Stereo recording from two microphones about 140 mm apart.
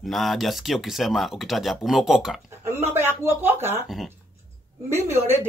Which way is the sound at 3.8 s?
Centre (ahead or behind).